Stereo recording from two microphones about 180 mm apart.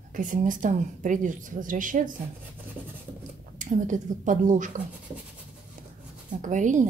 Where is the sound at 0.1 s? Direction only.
45° right (ahead or behind).